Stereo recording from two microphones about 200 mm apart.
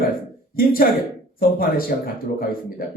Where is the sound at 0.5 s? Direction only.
45° left (ahead or behind).